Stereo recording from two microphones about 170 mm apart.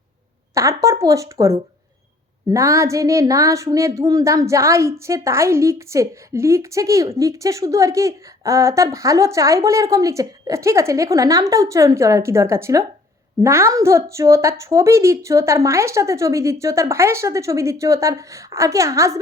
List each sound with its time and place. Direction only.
0.5 s speech: 20° right (ahead or behind)